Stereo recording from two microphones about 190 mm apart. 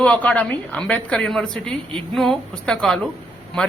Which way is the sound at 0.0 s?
5° left (ahead or behind).